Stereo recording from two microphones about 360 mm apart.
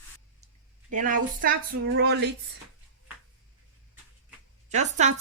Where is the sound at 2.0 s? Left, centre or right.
Right.